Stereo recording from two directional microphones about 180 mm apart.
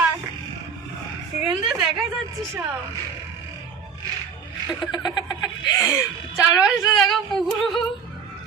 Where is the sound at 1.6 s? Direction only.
Centre (ahead or behind).